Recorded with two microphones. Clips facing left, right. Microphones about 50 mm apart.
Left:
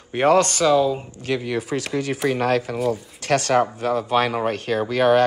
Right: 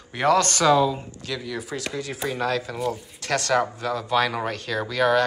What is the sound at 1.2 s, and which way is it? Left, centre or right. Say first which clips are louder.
Speech: left 8 dB; left.